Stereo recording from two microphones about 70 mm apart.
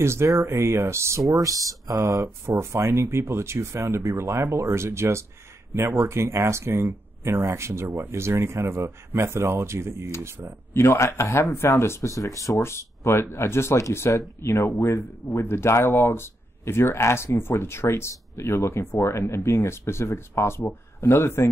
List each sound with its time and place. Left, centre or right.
0.0 s speech: right
1.3 s speech: right
10.7 s speech: left